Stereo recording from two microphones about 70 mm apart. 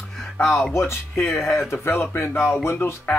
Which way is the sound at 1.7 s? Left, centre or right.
Left.